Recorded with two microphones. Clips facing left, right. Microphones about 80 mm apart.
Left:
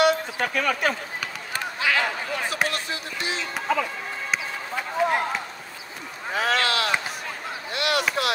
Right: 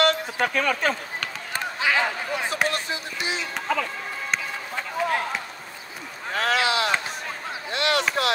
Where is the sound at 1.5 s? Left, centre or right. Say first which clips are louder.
Right 1 dB; right.